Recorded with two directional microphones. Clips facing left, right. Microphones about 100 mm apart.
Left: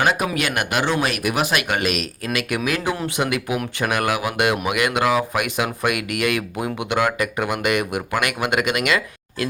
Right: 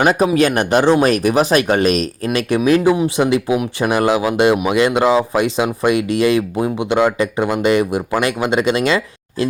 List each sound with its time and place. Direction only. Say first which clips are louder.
0.0 s speech: right 7 dB; 35° right (ahead or behind)